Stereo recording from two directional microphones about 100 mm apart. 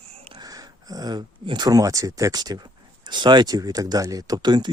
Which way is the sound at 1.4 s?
45° right (ahead or behind).